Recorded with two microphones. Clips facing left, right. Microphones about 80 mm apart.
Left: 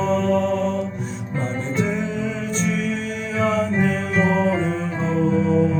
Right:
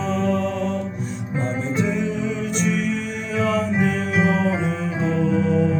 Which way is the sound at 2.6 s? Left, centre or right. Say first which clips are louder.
Even; left.